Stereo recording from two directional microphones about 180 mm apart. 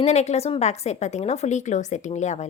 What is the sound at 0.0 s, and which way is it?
A woman's voice, 35° left (ahead or behind).